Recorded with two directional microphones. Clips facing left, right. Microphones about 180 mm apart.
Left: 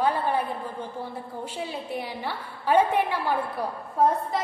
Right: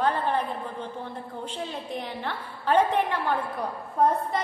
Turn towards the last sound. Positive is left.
turn(degrees=0)  # may be behind; listen again after turning